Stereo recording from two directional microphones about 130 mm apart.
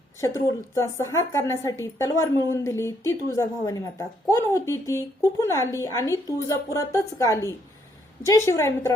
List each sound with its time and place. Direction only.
0.2 s speech: 20° left (ahead or behind)